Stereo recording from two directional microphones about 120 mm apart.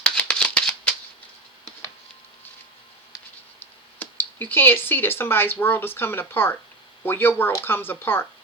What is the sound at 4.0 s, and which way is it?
Speech, 15° left (ahead or behind).